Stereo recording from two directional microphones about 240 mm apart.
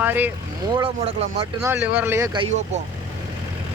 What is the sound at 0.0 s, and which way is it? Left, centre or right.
Speech, centre.